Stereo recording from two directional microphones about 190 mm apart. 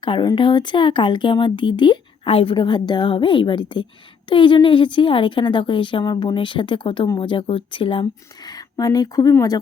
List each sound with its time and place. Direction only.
0.0 s a woman's voice: 25° left (ahead or behind)